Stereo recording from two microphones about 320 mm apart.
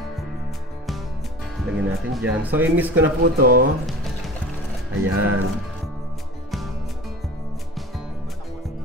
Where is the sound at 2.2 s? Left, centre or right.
Centre.